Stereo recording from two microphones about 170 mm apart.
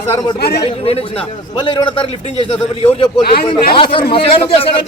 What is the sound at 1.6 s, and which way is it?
A man's voice, 30° left (ahead or behind).